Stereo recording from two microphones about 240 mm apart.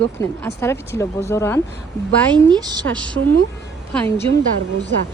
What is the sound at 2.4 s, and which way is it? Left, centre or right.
Speech, centre.